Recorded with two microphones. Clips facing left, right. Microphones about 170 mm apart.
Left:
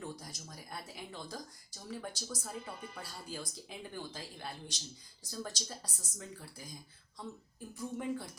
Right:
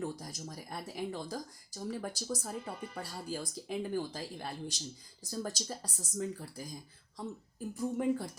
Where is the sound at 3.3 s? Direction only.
35° right (ahead or behind).